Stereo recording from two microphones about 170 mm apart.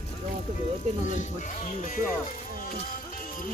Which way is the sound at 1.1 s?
45° left (ahead or behind).